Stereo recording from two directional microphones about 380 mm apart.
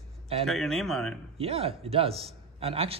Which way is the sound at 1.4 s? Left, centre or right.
Centre.